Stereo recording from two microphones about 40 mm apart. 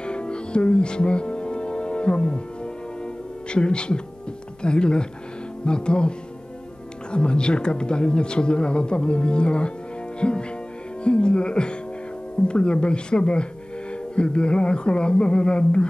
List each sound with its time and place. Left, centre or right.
0.0 s music: left
3.4 s speech: left